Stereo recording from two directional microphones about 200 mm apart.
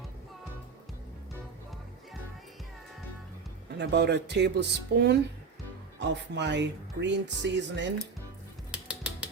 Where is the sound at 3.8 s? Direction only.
55° right (ahead or behind).